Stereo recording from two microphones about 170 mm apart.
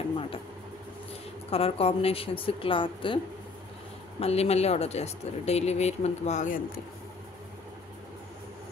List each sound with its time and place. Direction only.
1.5 s speech: 35° left (ahead or behind)
4.2 s speech: 40° left (ahead or behind)